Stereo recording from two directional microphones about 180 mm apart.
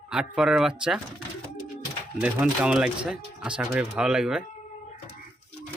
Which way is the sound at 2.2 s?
5° right (ahead or behind).